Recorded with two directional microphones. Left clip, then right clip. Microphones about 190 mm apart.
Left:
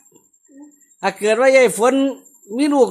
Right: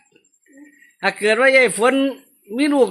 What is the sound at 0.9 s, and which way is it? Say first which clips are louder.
A man's voice: even; 10° left (ahead or behind).